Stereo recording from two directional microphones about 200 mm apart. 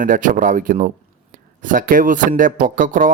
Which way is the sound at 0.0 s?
40° right (ahead or behind).